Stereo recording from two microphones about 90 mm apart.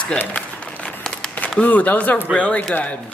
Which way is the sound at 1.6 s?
20° left (ahead or behind).